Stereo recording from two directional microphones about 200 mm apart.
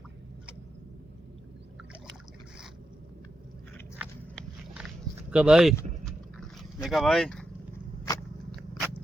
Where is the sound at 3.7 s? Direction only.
Centre (ahead or behind).